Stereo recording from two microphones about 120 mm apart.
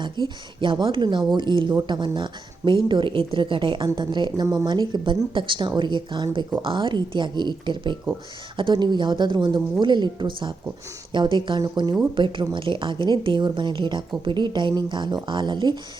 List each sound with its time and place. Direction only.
0.0 s speech: 40° right (ahead or behind)